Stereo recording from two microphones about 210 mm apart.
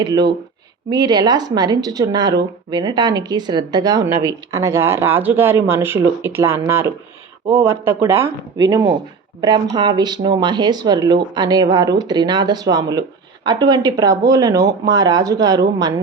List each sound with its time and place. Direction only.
0.0 s speech: 20° right (ahead or behind)